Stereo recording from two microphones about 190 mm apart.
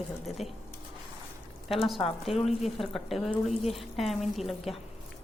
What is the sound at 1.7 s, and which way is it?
Speech, centre (ahead or behind).